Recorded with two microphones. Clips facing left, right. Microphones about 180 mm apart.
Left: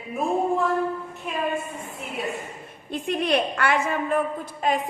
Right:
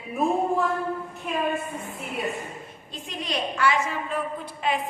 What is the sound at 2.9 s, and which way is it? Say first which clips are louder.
A woman's voice: left 9 dB; 60° left (ahead or behind).